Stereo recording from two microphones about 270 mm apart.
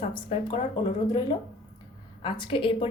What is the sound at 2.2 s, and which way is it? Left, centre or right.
Speech, centre.